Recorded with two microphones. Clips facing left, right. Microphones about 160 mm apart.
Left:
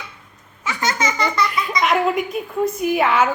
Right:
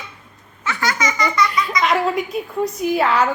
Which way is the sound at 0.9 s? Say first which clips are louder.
Even; 30° left (ahead or behind).